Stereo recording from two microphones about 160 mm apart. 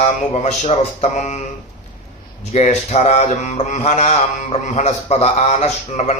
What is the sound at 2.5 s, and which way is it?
Mantra, 45° left (ahead or behind).